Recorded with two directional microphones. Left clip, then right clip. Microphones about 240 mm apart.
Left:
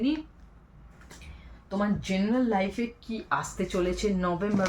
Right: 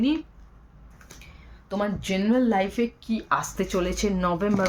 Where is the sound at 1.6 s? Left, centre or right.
Right.